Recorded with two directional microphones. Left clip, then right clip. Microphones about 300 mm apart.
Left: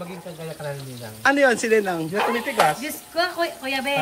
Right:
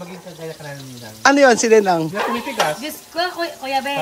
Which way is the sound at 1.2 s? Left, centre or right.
Centre.